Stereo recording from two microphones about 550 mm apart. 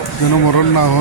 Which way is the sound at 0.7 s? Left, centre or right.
Left.